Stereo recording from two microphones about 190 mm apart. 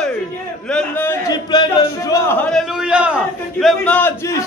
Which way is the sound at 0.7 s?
10° left (ahead or behind).